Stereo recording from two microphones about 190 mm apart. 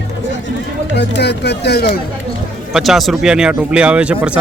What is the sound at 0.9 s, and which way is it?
Speech, 65° left (ahead or behind).